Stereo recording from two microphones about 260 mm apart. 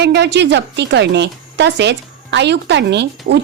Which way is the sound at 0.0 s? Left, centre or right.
Right.